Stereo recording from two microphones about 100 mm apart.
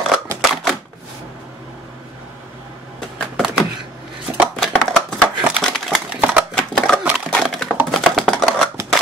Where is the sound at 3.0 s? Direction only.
Centre (ahead or behind).